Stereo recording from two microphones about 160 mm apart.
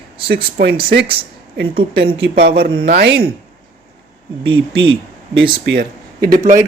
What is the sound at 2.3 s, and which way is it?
Speech, 75° right (ahead or behind).